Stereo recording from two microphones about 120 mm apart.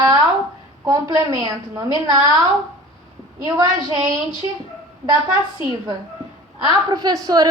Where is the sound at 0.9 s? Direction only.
30° right (ahead or behind).